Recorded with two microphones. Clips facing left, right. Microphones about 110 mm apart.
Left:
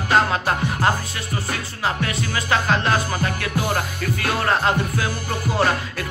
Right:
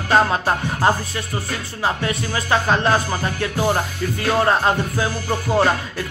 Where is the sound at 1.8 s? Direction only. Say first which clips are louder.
Right 3 dB; 20° right (ahead or behind).